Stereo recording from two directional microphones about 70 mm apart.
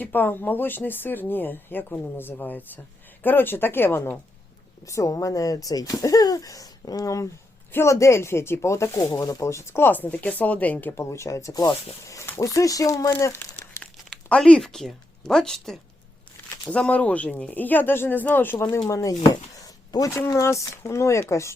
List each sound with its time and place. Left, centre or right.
0.0 s speech: left
4.9 s speech: left
7.7 s speech: left
9.5 s speech: left
10.9 s speech: left
14.3 s speech: centre
14.6 s speech: centre
16.6 s speech: centre
18.7 s speech: left